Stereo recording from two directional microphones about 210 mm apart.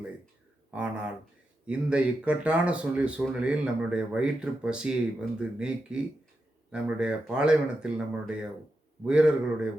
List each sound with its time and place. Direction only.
0.7 s speech: 5° right (ahead or behind)